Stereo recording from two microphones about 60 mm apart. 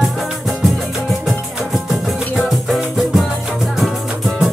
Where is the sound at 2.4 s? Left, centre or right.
Centre.